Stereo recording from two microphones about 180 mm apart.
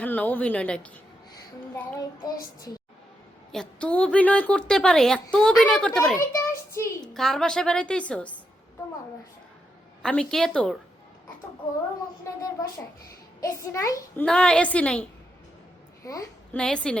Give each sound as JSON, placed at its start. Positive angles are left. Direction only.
{"t": 0.0, "sound": "a child's voice", "side_deg": 10}
{"t": 1.7, "sound": "a child's voice", "side_deg": 20}
{"t": 3.5, "sound": "a woman's voice", "side_deg": 5}
{"t": 6.3, "sound": "a child's voice", "side_deg": 15}
{"t": 7.1, "sound": "a woman's voice", "side_deg": 0}
{"t": 10.0, "sound": "a woman's voice", "side_deg": 5}
{"t": 12.3, "sound": "a child's voice", "side_deg": 15}
{"t": 14.3, "sound": "a woman's voice", "side_deg": 5}
{"t": 16.0, "sound": "a child's voice", "side_deg": 20}
{"t": 16.6, "sound": "a woman's voice", "side_deg": 5}